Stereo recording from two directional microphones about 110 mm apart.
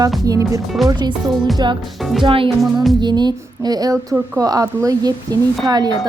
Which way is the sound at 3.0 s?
40° right (ahead or behind).